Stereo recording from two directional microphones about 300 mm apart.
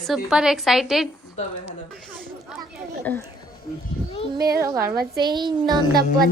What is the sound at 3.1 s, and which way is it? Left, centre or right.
Speech, centre.